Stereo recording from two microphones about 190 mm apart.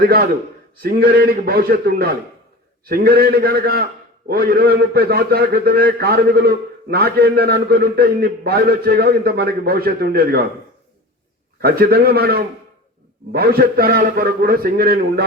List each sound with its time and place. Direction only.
0.8 s a man's voice: 55° right (ahead or behind)
11.6 s a man's voice: 55° right (ahead or behind)